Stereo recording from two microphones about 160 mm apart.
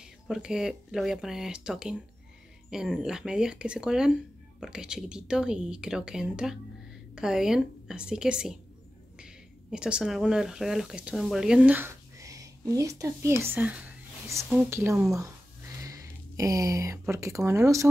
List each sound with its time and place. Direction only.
0.0 s a woman's voice: 5° right (ahead or behind)